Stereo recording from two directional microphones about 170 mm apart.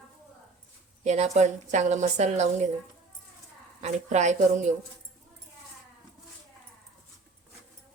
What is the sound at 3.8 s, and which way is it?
Speech, 40° right (ahead or behind).